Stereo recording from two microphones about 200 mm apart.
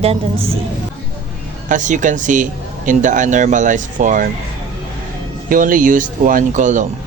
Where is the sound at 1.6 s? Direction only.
40° right (ahead or behind).